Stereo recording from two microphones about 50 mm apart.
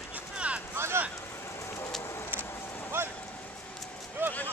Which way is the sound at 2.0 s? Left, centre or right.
Left.